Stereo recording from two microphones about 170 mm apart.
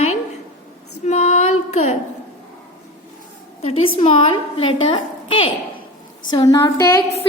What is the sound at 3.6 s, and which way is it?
A woman's voice, 35° left (ahead or behind).